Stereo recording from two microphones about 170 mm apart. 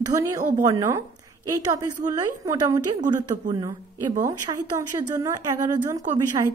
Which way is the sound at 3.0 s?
45° right (ahead or behind).